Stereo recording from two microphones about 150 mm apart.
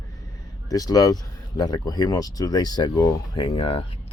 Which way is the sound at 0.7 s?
25° left (ahead or behind).